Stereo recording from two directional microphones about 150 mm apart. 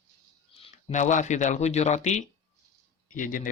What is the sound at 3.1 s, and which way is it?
Speech, 60° left (ahead or behind).